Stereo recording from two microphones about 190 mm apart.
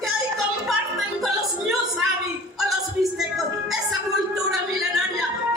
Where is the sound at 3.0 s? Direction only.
Centre (ahead or behind).